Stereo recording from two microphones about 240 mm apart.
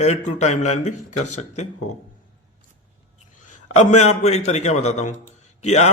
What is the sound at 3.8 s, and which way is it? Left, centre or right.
A man's voice, left.